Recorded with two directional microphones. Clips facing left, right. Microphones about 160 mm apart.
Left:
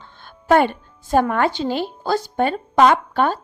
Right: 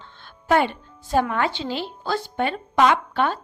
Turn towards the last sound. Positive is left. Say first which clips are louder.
# left 3 dB
turn(degrees=45)  # may be behind; listen again after turning